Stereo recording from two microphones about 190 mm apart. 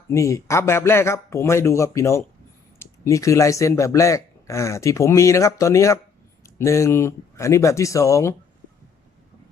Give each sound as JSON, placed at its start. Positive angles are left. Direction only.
{"t": 0.1, "sound": "speech", "side_deg": 15}